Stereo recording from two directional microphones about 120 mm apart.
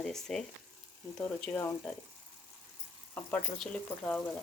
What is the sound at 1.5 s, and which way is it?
Speech, 20° left (ahead or behind).